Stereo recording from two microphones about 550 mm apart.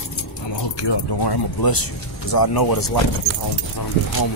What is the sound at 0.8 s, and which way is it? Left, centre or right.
Speech, left.